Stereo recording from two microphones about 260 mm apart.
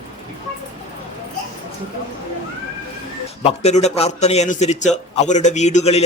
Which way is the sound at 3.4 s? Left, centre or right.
Left.